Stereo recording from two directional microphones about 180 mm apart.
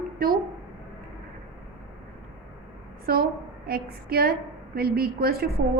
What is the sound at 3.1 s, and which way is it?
A woman's voice, 60° right (ahead or behind).